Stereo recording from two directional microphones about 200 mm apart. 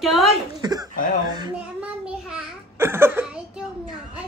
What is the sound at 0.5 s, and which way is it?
Speech, 20° right (ahead or behind).